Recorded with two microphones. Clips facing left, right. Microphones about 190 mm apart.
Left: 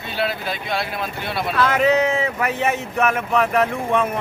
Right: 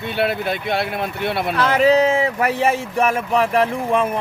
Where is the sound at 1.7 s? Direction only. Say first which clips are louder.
Right 4 dB; 30° right (ahead or behind).